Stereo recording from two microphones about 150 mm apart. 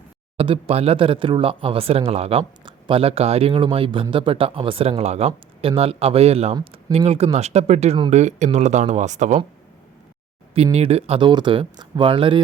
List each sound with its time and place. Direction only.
0.3 s speech: 40° right (ahead or behind)
10.5 s speech: 40° right (ahead or behind)